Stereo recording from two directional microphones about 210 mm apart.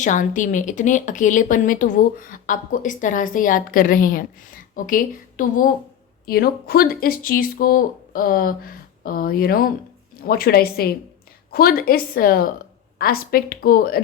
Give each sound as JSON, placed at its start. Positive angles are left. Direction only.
{"t": 0.0, "sound": "speech", "side_deg": 35}